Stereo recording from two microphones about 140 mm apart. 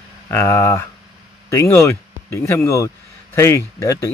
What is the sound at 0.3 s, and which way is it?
Speech, 20° left (ahead or behind).